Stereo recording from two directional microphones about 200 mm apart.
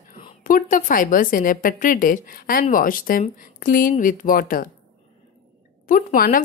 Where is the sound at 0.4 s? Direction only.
45° left (ahead or behind).